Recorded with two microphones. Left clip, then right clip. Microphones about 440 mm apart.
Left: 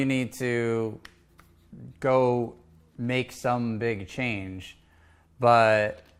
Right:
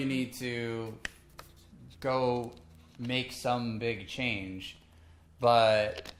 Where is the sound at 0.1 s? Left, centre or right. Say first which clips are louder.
Left 7 dB; left.